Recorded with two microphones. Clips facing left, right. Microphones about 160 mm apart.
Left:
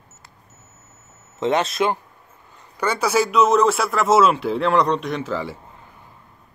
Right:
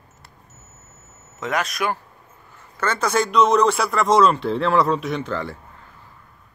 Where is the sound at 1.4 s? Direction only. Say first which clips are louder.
Left 5 dB; 25° left (ahead or behind).